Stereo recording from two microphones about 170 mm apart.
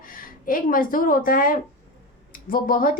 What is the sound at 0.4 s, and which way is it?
A woman's voice, 55° left (ahead or behind).